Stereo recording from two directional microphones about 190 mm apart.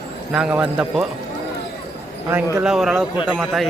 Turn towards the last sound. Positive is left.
turn(degrees=0)  # may be behind; listen again after turning